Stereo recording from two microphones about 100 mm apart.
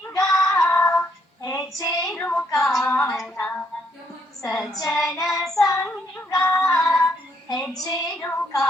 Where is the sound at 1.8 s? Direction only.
35° left (ahead or behind).